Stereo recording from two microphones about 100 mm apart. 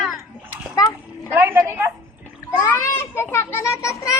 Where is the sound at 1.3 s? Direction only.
20° right (ahead or behind).